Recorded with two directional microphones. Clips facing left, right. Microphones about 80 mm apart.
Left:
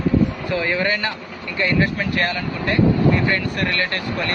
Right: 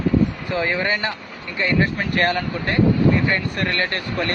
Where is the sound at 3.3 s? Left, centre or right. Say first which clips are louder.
Left 1 dB; right.